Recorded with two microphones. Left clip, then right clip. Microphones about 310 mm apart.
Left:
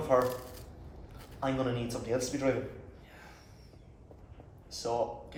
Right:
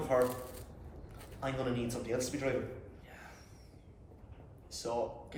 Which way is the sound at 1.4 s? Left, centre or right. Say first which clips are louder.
Left 4 dB; centre.